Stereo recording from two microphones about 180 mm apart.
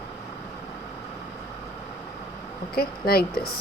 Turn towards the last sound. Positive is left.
turn(degrees=60)  # may be behind; listen again after turning